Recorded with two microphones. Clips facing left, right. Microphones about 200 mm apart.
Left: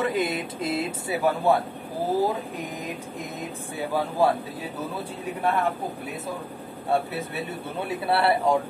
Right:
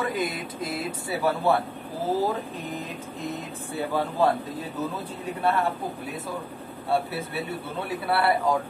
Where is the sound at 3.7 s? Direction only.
10° left (ahead or behind).